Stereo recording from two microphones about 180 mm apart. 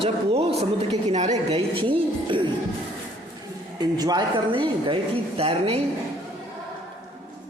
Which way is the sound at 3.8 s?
20° right (ahead or behind).